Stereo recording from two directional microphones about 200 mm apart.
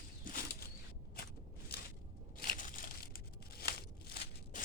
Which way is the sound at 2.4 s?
45° left (ahead or behind).